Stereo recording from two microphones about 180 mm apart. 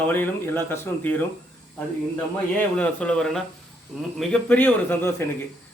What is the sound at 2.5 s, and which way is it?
A man's voice, 5° left (ahead or behind).